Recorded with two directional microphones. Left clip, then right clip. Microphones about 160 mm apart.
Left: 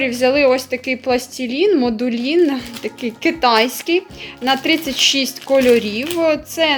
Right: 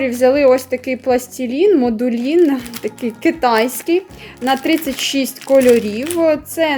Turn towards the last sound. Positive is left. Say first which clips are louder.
# right 1 dB
turn(degrees=-35)  # may be behind; listen again after turning